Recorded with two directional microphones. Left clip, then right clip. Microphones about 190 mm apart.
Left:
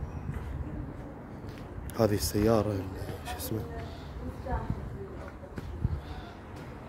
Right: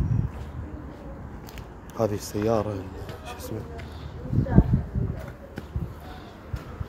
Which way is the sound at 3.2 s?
20° left (ahead or behind).